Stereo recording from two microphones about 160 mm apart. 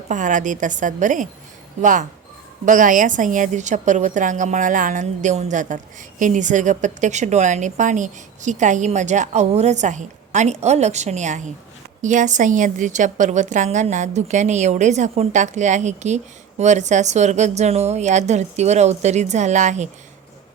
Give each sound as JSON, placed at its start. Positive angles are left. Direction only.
{"t": 0.1, "sound": "a woman's voice", "side_deg": -50}